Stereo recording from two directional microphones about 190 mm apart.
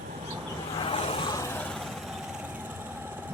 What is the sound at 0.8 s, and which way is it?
Vehicle, 30° left (ahead or behind).